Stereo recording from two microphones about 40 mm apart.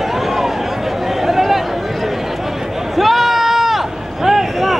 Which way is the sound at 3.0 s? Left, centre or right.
Centre.